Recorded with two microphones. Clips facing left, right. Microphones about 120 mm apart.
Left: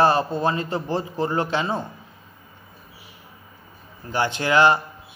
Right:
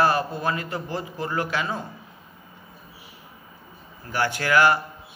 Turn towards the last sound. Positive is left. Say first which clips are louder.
# left 2 dB
turn(degrees=20)  # may be behind; listen again after turning